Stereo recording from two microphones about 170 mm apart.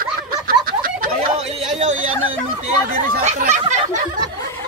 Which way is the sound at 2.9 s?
45° right (ahead or behind).